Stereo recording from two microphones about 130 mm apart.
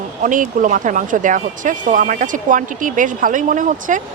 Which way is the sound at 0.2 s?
90° right.